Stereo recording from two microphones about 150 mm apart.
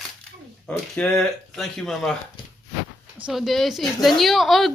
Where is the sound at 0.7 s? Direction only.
5° left (ahead or behind).